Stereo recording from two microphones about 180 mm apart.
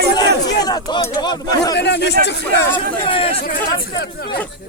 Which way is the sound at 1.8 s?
70° left (ahead or behind).